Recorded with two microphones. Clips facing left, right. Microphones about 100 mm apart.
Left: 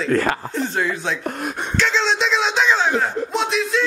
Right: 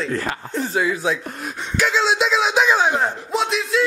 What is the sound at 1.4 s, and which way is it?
Beatboxing, 55° left (ahead or behind).